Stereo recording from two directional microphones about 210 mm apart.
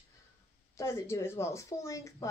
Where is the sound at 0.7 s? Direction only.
15° left (ahead or behind).